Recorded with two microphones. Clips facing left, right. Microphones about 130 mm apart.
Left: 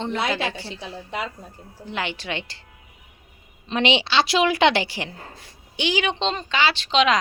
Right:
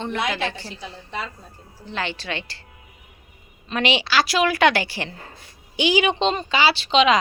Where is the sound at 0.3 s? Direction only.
10° left (ahead or behind).